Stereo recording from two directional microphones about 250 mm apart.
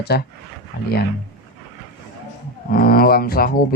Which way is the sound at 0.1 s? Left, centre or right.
Left.